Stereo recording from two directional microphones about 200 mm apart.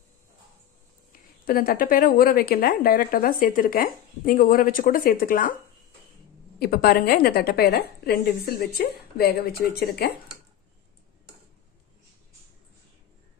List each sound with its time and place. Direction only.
1.4 s a woman's voice: 45° left (ahead or behind)
6.6 s a woman's voice: 50° left (ahead or behind)